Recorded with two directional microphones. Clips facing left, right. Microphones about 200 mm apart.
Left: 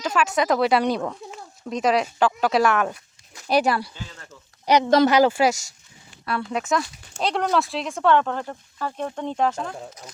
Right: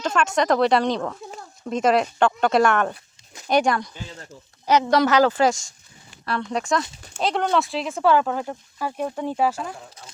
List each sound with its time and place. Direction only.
0.0 s a woman's voice: 5° left (ahead or behind)